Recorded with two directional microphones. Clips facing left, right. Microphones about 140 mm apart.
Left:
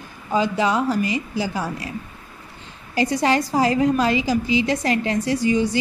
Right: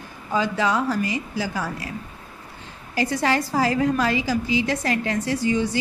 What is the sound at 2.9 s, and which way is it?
A woman's voice, 20° left (ahead or behind).